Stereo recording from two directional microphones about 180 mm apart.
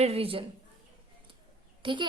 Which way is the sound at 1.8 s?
25° right (ahead or behind).